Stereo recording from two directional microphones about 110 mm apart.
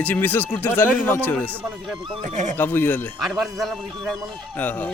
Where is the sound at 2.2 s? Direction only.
90° right.